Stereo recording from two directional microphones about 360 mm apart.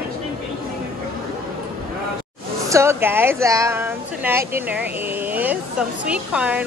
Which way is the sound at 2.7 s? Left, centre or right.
Centre.